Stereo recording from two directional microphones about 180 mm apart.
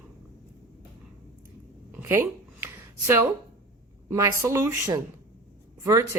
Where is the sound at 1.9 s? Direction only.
15° right (ahead or behind).